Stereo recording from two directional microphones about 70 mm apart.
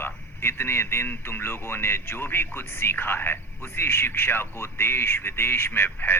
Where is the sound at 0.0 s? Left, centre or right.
Left.